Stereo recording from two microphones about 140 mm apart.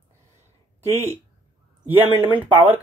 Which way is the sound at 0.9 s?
50° right (ahead or behind).